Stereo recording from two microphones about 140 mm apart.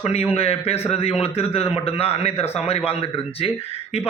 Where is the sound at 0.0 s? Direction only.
45° left (ahead or behind).